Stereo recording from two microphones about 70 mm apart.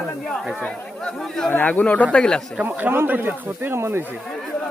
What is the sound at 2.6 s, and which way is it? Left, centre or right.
Speech, right.